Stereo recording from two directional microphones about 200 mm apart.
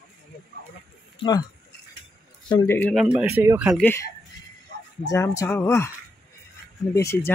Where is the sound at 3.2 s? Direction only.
10° right (ahead or behind).